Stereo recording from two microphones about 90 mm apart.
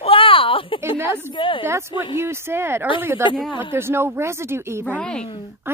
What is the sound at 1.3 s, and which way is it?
Speech, 65° left (ahead or behind).